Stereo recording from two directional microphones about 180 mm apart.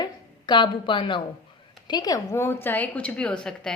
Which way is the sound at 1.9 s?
20° left (ahead or behind).